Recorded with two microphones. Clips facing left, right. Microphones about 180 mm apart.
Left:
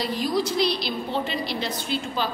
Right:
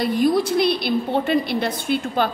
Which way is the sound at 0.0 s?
55° right (ahead or behind).